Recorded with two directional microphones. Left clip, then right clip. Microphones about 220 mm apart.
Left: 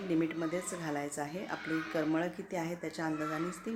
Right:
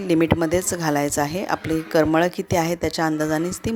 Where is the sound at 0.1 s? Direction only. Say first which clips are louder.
Right 15 dB; 45° right (ahead or behind).